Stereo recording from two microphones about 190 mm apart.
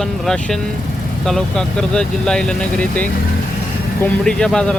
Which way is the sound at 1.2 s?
Centre (ahead or behind).